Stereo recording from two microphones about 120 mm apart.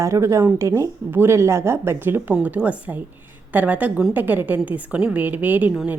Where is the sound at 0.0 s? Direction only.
25° right (ahead or behind).